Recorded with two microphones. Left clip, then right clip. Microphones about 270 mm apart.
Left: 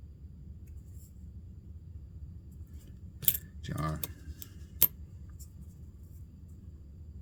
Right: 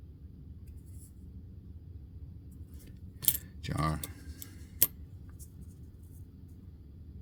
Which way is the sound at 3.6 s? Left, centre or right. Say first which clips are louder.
Right 4 dB; right.